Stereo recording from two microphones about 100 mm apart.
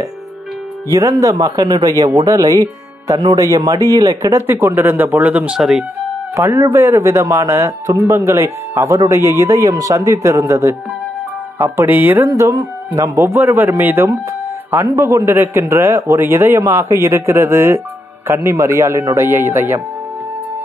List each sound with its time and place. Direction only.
1.3 s a man's voice: 45° right (ahead or behind); by 5.9 s 5° right (ahead or behind)
6.3 s a man's voice: 25° right (ahead or behind)